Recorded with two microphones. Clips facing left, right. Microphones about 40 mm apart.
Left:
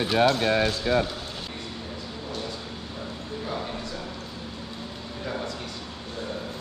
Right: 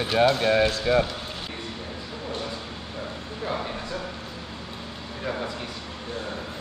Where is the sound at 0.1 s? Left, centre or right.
Centre.